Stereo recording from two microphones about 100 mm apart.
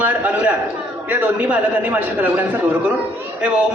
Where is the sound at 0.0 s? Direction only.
15° right (ahead or behind).